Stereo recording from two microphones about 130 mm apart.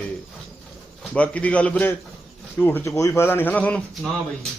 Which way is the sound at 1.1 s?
10° left (ahead or behind).